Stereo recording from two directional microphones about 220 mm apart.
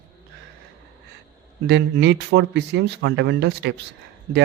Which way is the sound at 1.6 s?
50° right (ahead or behind).